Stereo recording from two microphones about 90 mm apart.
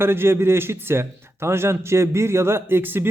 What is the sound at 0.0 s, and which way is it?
A man's voice, 25° right (ahead or behind).